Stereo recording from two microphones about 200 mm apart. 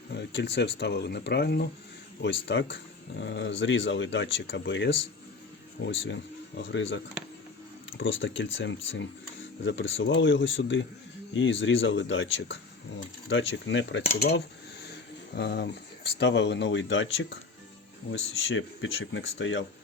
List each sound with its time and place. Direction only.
0.1 s speech: 60° left (ahead or behind)
14.2 s cutlery: 50° left (ahead or behind)
15.4 s speech: 55° left (ahead or behind)